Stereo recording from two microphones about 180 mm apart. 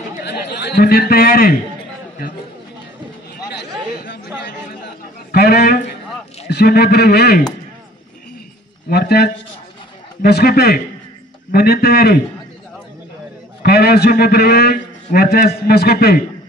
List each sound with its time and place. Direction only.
0.2 s a man's voice: 70° left (ahead or behind)
3.4 s chatter: 70° left (ahead or behind)
4.5 s a sound: 70° left (ahead or behind)
6.4 s a man's voice: 60° left (ahead or behind)
8.8 s a man's voice: 60° left (ahead or behind)
13.6 s a man's voice: 60° left (ahead or behind)